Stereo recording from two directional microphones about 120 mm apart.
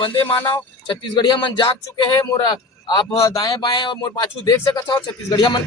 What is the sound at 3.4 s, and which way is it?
Speech, 40° left (ahead or behind).